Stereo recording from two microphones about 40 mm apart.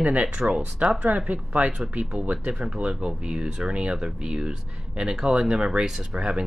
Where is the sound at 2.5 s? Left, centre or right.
Centre.